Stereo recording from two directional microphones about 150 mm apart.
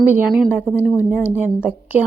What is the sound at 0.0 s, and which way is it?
Speech, 10° right (ahead or behind).